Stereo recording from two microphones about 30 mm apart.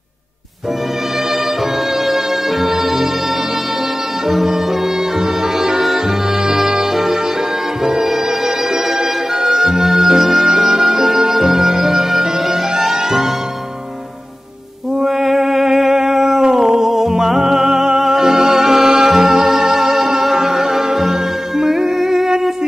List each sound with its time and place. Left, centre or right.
2.0 s music: centre
5.6 s music: centre
9.4 s music: centre
15.0 s music: centre